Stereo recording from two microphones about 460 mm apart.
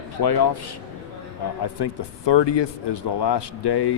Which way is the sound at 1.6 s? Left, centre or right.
Left.